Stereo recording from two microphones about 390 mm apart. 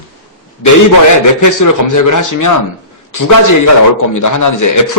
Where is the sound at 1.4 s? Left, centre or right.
Left.